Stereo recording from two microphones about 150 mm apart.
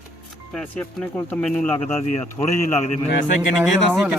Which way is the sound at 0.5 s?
10° left (ahead or behind).